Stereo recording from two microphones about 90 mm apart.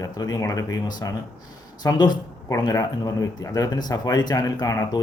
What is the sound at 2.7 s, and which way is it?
Speech, 40° left (ahead or behind).